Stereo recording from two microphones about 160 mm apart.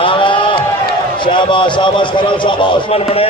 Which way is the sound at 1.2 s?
30° left (ahead or behind).